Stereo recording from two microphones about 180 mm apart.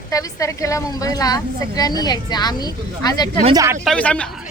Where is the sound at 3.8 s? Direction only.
5° left (ahead or behind).